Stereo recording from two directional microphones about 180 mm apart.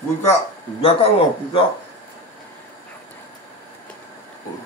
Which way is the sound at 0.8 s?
35° left (ahead or behind).